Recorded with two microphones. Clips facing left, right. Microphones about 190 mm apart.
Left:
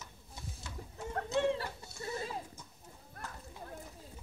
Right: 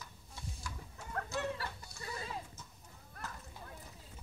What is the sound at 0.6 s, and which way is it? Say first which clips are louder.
Chicken: left 4 dB; 25° left (ahead or behind).